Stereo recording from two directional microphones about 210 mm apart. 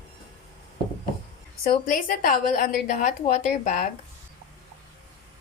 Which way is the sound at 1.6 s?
40° left (ahead or behind).